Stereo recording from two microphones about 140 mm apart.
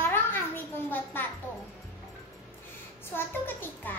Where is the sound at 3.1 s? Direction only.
15° left (ahead or behind).